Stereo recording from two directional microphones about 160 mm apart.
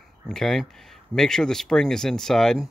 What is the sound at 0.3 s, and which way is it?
Speech, centre (ahead or behind).